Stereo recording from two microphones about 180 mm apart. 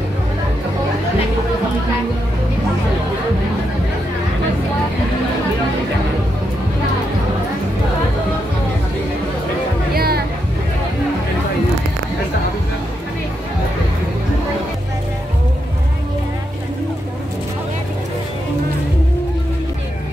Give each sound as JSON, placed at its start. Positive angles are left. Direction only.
{"t": 9.9, "sound": "music", "side_deg": -60}